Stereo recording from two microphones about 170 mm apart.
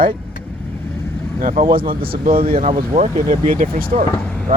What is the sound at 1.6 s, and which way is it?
Speech, 55° right (ahead or behind).